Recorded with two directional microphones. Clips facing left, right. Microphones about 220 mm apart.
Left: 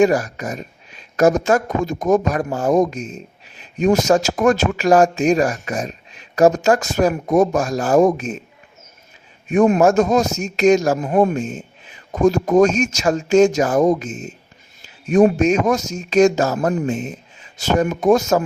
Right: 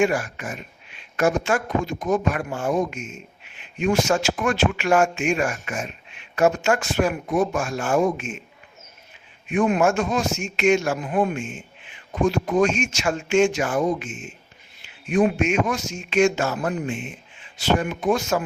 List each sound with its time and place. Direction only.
0.0 s speech: 40° left (ahead or behind)
9.5 s speech: 40° left (ahead or behind)